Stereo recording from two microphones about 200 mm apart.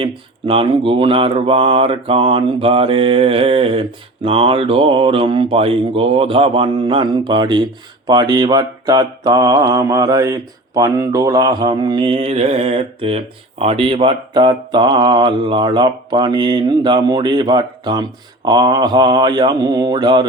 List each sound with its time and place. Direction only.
0.0 s speech: 25° right (ahead or behind)